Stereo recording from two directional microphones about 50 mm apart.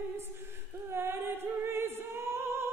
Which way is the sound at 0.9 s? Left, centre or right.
Right.